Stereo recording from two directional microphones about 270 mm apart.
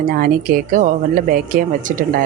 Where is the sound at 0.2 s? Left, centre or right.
Right.